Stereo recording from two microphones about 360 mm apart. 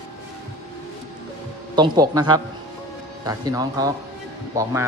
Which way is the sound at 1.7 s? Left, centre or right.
Centre.